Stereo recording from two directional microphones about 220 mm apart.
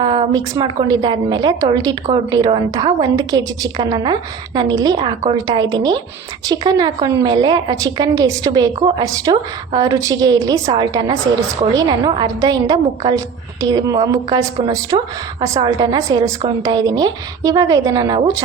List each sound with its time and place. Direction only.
0.0 s a woman's voice: 20° right (ahead or behind)